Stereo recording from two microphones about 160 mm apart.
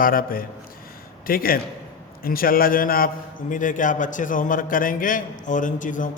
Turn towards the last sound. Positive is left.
turn(degrees=55)  # may be behind; listen again after turning